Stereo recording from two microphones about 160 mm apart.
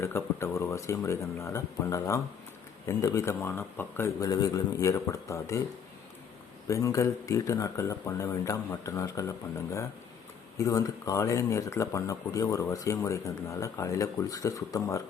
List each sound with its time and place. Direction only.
0.0 s speech: 15° left (ahead or behind)
6.7 s speech: 20° left (ahead or behind)